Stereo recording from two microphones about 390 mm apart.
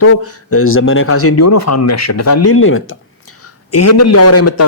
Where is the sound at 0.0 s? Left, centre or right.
Left.